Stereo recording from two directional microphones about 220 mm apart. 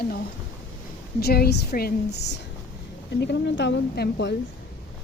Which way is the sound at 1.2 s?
45° left (ahead or behind).